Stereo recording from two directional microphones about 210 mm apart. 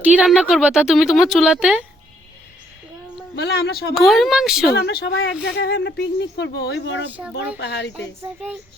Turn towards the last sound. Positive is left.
turn(degrees=55)  # may be behind; listen again after turning